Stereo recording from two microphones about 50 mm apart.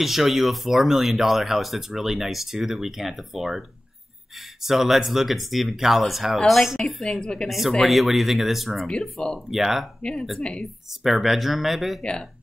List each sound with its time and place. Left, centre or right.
0.0 s speech: centre
7.4 s speech: centre
8.8 s speech: centre
9.5 s speech: centre
11.1 s speech: centre
12.0 s speech: centre